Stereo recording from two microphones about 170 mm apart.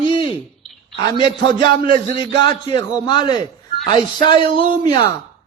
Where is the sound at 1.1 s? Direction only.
30° left (ahead or behind).